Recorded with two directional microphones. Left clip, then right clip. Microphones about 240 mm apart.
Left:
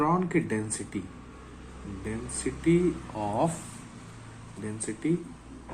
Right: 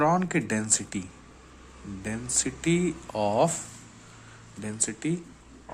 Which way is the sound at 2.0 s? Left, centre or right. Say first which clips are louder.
Right 4 dB; right.